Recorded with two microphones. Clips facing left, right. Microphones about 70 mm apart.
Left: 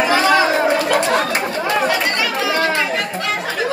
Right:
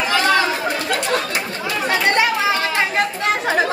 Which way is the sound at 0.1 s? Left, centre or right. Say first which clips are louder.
Left 1 dB; centre.